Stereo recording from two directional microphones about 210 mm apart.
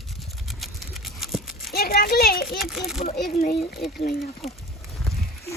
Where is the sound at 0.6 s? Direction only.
Centre (ahead or behind).